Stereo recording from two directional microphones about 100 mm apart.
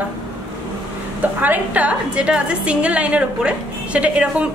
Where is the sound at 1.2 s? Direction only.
15° right (ahead or behind).